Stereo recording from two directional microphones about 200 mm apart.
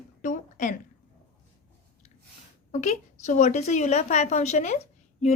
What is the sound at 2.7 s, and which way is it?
Speech, 35° left (ahead or behind).